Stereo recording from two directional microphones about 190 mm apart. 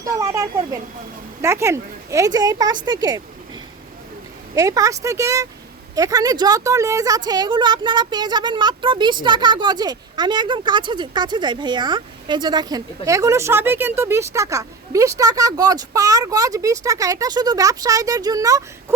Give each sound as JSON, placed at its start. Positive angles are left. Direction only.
{"t": 0.0, "sound": "speech", "side_deg": -15}
{"t": 4.5, "sound": "speech", "side_deg": -15}